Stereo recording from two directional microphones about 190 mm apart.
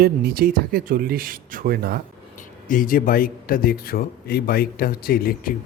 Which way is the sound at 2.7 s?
45° left (ahead or behind).